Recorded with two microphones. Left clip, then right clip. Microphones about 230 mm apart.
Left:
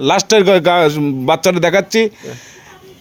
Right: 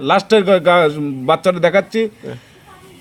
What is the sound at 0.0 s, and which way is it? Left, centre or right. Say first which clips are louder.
A man's voice: left 2 dB; left.